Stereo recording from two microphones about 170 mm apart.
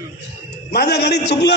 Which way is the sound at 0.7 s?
75° left (ahead or behind).